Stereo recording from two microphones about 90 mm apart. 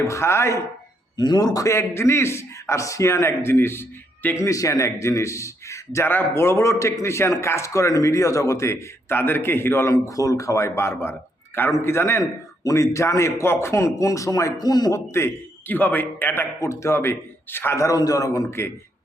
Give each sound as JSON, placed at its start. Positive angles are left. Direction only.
{"t": 0.0, "sound": "a man's voice", "side_deg": 35}
{"t": 1.1, "sound": "a man's voice", "side_deg": 50}
{"t": 1.5, "sound": "a man's voice", "side_deg": 35}
{"t": 4.4, "sound": "a man's voice", "side_deg": 40}
{"t": 9.9, "sound": "a man's voice", "side_deg": 40}
{"t": 15.1, "sound": "a man's voice", "side_deg": 25}
{"t": 16.6, "sound": "a man's voice", "side_deg": 35}
{"t": 17.7, "sound": "a man's voice", "side_deg": 40}